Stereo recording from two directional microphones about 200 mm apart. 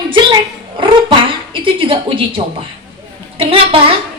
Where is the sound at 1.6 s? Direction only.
25° right (ahead or behind).